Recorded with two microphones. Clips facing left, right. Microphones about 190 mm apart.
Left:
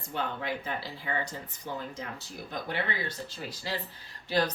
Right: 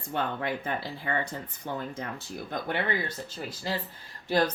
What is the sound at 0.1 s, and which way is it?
Speech, 55° right (ahead or behind).